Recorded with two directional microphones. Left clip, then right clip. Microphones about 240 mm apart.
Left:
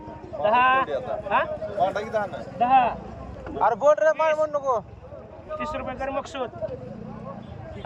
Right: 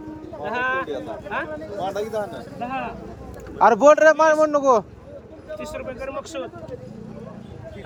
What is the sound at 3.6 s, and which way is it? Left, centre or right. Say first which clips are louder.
Speech: right 6 dB; right.